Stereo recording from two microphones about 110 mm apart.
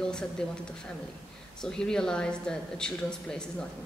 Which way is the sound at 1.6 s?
5° left (ahead or behind).